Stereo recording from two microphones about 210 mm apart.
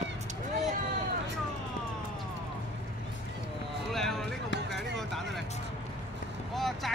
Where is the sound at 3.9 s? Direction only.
Centre (ahead or behind).